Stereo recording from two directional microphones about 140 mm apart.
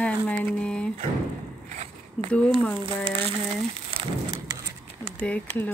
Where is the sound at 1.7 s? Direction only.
60° right (ahead or behind).